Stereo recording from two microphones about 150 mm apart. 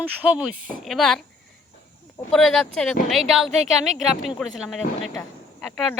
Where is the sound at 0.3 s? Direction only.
5° right (ahead or behind).